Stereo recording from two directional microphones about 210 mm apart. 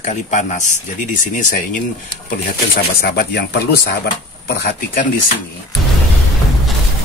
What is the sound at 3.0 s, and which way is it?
Speech, 50° left (ahead or behind).